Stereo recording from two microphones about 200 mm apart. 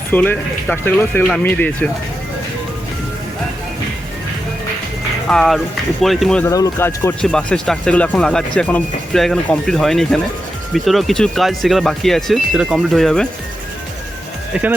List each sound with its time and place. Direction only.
0.1 s speech: 10° left (ahead or behind)
5.3 s speech: centre (ahead or behind)
6.5 s speech: 15° left (ahead or behind)